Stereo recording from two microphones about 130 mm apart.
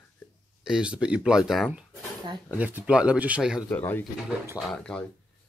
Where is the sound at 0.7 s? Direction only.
5° right (ahead or behind).